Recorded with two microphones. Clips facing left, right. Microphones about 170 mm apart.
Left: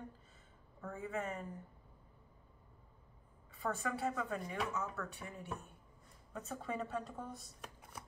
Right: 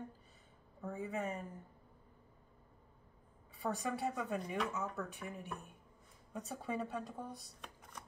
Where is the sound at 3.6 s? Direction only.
15° right (ahead or behind).